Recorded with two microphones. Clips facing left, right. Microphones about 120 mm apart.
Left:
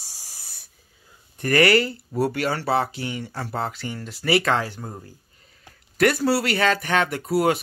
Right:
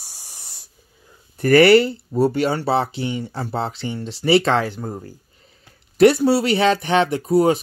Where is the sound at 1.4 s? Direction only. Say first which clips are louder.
Right 7 dB; 30° right (ahead or behind).